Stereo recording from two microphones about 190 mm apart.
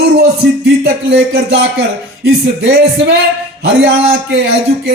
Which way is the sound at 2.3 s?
65° right (ahead or behind).